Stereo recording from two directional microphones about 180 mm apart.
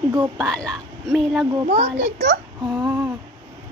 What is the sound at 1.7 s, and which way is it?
Speech, 40° right (ahead or behind).